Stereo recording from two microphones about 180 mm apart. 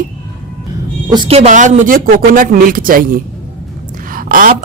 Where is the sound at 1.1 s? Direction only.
30° right (ahead or behind).